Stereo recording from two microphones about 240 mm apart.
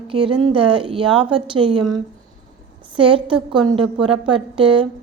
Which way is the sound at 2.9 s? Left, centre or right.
Right.